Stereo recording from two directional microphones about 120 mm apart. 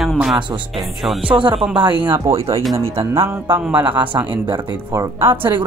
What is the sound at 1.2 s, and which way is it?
Speech, 45° right (ahead or behind).